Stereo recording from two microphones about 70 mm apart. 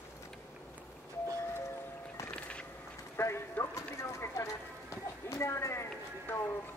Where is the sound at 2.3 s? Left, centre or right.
Centre.